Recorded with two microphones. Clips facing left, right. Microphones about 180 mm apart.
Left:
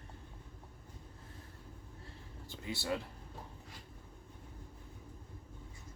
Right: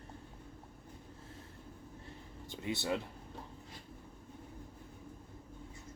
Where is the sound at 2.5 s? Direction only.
20° right (ahead or behind).